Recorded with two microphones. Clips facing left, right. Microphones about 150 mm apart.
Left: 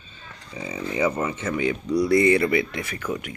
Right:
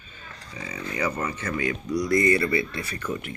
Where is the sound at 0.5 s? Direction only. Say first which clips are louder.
Left 5 dB; 25° left (ahead or behind).